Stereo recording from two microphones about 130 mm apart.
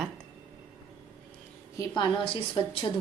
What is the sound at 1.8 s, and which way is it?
Speech, 35° left (ahead or behind).